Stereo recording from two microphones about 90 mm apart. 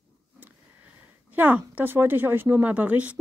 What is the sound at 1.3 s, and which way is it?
Speech, 20° right (ahead or behind).